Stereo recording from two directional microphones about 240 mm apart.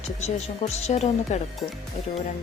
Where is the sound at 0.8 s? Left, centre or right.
Left.